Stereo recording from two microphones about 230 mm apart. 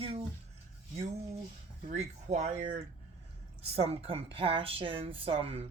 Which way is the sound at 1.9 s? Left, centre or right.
Right.